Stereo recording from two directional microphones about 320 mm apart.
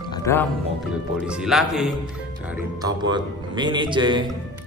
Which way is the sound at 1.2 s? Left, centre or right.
Centre.